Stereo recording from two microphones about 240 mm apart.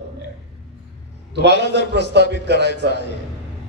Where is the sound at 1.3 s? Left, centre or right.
Right.